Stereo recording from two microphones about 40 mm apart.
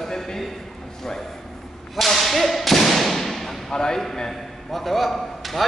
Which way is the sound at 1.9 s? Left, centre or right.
Centre.